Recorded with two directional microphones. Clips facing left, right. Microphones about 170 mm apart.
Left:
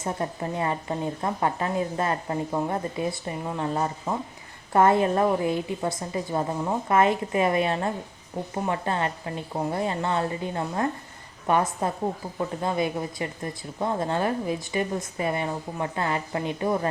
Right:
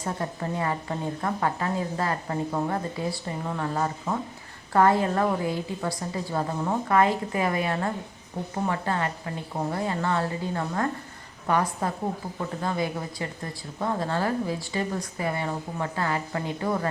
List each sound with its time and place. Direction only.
0.0 s speech: 20° left (ahead or behind)